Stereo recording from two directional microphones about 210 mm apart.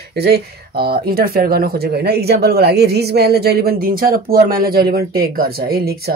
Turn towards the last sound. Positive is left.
turn(degrees=-50)  # may be behind; listen again after turning